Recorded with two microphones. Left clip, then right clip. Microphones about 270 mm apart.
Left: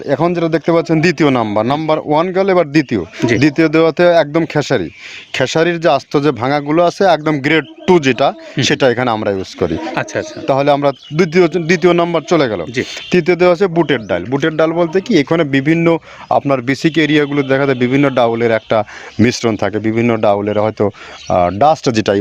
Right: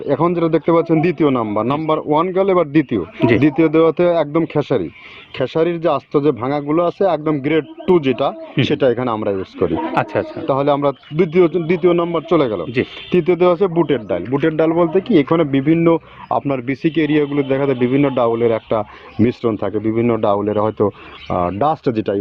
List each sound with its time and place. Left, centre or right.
0.1 s speech: left
9.9 s speech: centre
10.4 s speech: left